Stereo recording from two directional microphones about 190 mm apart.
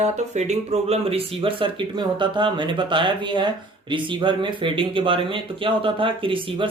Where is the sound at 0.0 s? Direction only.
35° right (ahead or behind).